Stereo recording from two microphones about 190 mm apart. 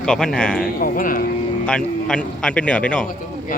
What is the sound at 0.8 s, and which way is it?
Speech, 45° left (ahead or behind).